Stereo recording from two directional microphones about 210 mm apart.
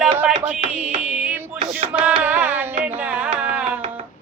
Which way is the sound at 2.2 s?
10° right (ahead or behind).